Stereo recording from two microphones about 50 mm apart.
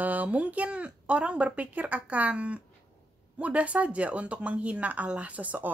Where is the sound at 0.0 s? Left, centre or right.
Right.